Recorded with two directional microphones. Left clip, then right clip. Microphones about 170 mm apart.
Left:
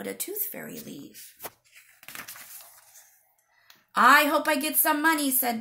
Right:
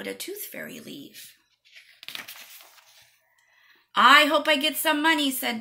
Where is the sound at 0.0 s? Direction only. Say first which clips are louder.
Right 1 dB; 65° left (ahead or behind).